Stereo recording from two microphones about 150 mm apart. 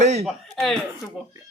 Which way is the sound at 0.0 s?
50° right (ahead or behind).